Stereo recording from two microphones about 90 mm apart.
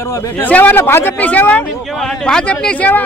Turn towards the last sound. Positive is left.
turn(degrees=15)  # may be behind; listen again after turning